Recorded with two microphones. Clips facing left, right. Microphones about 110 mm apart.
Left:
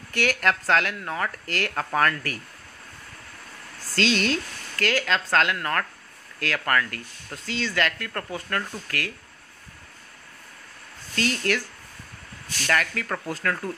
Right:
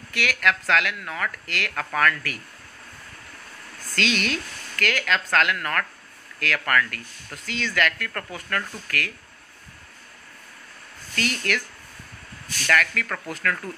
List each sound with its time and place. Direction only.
0.1 s speech: 40° left (ahead or behind)
3.9 s speech: 30° left (ahead or behind)
11.1 s speech: 30° left (ahead or behind)
12.6 s speech: 25° left (ahead or behind)